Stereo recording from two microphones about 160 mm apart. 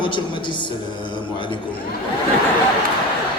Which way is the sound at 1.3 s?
30° left (ahead or behind).